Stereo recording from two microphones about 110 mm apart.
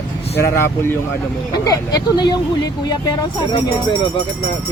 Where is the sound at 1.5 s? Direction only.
35° left (ahead or behind).